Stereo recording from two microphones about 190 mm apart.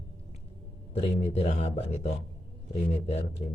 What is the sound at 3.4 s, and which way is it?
Speech, 40° left (ahead or behind).